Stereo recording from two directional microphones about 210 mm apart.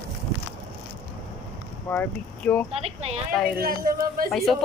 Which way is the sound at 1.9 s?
5° left (ahead or behind).